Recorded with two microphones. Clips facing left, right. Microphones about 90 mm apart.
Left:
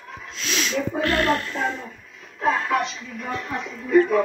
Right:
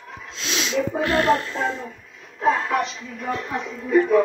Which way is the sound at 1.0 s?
25° right (ahead or behind).